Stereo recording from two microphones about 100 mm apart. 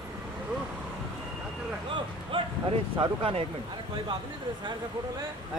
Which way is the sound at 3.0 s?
65° right (ahead or behind).